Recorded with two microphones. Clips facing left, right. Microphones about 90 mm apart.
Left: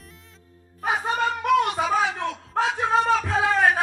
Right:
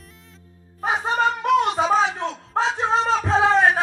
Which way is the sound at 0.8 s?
25° right (ahead or behind).